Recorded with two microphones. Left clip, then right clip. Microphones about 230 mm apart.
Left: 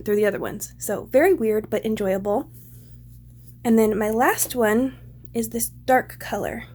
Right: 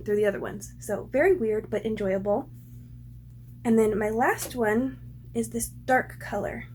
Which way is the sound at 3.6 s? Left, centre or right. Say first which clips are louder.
Left 4 dB; left.